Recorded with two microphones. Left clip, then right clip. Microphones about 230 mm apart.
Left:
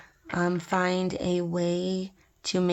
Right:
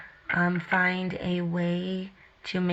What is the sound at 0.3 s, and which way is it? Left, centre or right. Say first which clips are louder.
Speech: right 1 dB; left.